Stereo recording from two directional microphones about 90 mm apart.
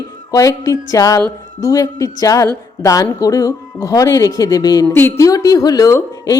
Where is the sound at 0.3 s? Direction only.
40° left (ahead or behind).